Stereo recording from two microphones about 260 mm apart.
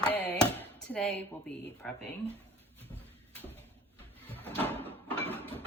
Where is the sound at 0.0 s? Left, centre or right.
Centre.